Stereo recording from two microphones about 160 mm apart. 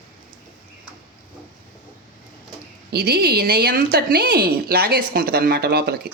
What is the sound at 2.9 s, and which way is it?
A woman's voice, 80° right.